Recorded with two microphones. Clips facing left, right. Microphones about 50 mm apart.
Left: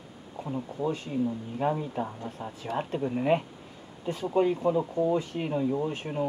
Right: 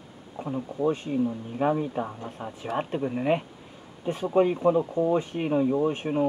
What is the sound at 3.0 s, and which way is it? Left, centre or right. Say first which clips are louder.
Speech: left 1 dB; centre.